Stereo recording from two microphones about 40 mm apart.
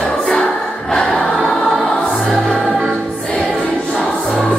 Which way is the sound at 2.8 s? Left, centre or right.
Left.